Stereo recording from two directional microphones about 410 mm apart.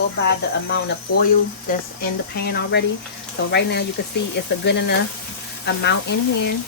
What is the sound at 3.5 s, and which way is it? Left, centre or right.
Speech, left.